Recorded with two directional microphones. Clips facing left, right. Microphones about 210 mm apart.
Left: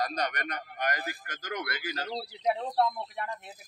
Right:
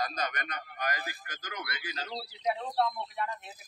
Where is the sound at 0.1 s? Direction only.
40° left (ahead or behind).